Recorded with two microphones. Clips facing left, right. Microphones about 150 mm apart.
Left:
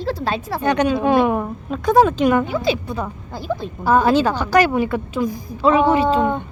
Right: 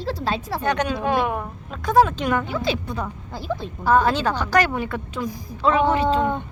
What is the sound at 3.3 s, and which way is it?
Speech, 45° left (ahead or behind).